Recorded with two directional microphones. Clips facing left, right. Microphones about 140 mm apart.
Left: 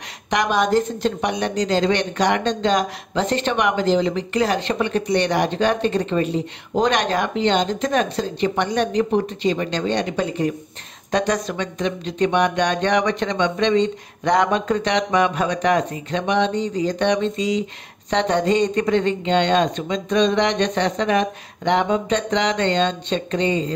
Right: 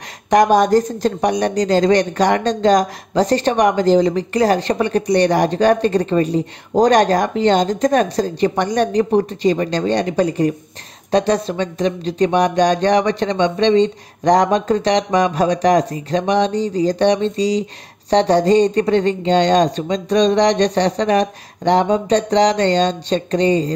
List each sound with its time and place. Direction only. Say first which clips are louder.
0.3 s speech: right 7 dB; 45° right (ahead or behind)